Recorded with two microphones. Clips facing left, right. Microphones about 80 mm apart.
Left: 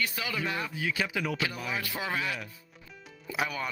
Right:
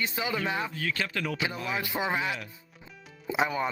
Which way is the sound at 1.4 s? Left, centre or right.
Right.